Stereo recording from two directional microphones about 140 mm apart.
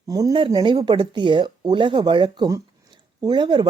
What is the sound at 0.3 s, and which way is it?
Speech, 35° right (ahead or behind).